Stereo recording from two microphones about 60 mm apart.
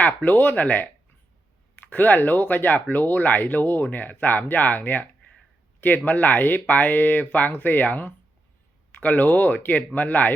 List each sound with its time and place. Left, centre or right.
0.0 s speech: left
6.1 s speech: left